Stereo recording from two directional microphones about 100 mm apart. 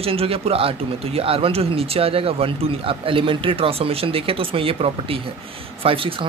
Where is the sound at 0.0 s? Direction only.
75° right (ahead or behind).